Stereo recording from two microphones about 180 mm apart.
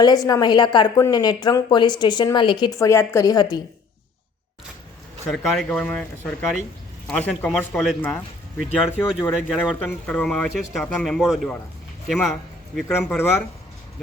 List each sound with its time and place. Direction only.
0.0 s a woman's voice: 20° left (ahead or behind)
5.3 s speech: centre (ahead or behind)
13.0 s speech: 10° left (ahead or behind)